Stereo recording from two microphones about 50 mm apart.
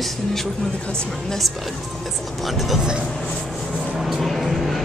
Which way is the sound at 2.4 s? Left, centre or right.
Centre.